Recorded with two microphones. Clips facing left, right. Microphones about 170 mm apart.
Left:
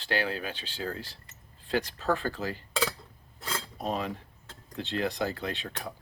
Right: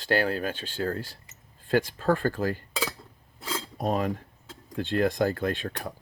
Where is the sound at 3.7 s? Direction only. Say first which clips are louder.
Right 6 dB; 50° right (ahead or behind).